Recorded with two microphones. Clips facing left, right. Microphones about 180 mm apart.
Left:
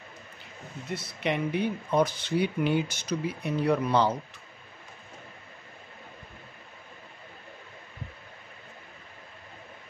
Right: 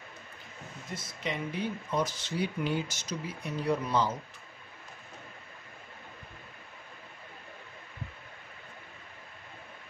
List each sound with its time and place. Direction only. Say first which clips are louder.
0.9 s speech: left 6 dB; 65° left (ahead or behind)